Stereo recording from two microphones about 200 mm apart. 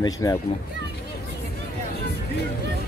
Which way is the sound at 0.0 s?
15° left (ahead or behind).